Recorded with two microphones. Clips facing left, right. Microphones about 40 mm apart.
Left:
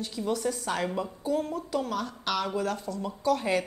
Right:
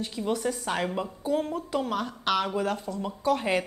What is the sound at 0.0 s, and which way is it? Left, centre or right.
Speech, right.